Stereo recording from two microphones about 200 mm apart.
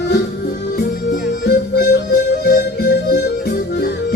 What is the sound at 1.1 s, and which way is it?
Music, 50° left (ahead or behind).